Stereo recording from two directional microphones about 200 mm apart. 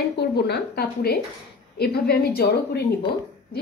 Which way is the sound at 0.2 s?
55° left (ahead or behind).